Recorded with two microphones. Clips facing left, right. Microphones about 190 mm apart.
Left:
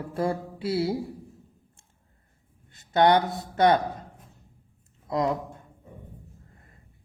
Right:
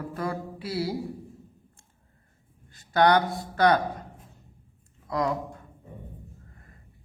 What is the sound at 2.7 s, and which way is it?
Speech, 25° left (ahead or behind).